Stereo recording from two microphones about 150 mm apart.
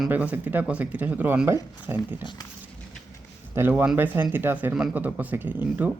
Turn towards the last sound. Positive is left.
turn(degrees=-10)  # may be behind; listen again after turning